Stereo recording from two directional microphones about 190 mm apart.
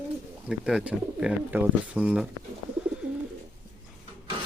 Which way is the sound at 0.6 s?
5° right (ahead or behind).